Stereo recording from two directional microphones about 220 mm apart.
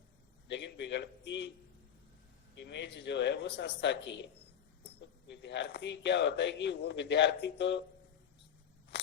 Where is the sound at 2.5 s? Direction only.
50° left (ahead or behind).